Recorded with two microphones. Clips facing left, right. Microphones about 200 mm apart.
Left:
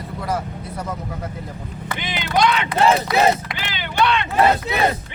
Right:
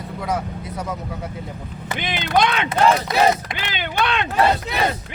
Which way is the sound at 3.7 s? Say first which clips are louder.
Left 3 dB; 50° right (ahead or behind).